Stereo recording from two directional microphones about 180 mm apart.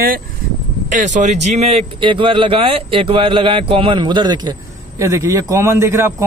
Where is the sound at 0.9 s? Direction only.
45° right (ahead or behind).